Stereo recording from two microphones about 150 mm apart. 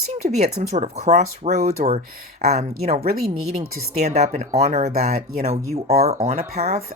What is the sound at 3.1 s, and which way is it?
Speech, 80° right.